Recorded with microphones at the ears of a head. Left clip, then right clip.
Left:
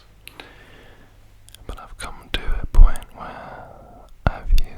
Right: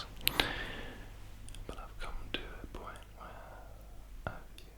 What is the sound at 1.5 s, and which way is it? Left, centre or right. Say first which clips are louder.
Whispering: left 10 dB; left.